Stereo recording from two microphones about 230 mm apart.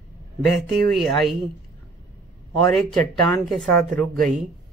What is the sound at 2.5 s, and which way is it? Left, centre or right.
A man's voice, centre.